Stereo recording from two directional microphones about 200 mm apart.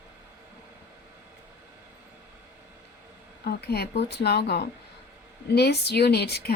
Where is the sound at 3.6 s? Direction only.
55° left (ahead or behind).